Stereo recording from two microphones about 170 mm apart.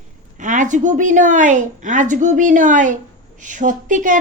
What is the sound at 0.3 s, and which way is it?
A woman's voice, 50° right (ahead or behind).